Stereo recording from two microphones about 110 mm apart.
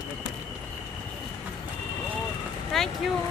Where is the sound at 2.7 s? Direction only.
Centre (ahead or behind).